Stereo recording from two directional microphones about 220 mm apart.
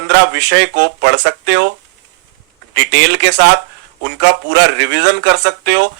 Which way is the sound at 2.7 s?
55° right (ahead or behind).